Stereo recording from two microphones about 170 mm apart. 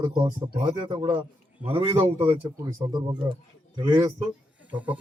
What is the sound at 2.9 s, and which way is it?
Speech, 25° right (ahead or behind).